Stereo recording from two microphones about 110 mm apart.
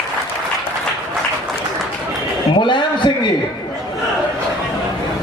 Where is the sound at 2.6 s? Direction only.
45° left (ahead or behind).